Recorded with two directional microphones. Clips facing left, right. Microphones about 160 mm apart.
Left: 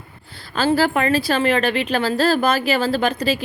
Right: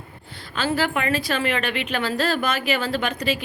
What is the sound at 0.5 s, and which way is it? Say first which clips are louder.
A woman's voice: left 5 dB; 35° left (ahead or behind).